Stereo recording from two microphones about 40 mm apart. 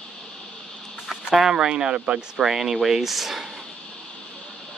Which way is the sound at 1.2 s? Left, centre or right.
Centre.